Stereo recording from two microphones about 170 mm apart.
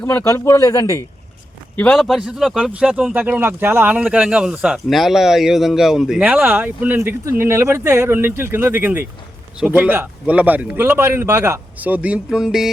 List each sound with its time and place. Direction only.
0.0 s a man's voice: 15° left (ahead or behind)
2.0 s speech: centre (ahead or behind)